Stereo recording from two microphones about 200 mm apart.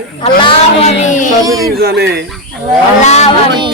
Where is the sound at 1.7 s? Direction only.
50° right (ahead or behind).